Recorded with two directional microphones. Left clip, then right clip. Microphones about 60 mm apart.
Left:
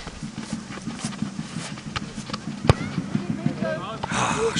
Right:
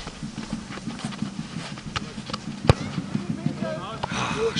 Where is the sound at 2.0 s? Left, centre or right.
Centre.